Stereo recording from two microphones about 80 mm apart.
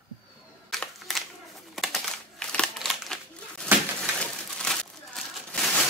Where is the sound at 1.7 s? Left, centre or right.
Centre.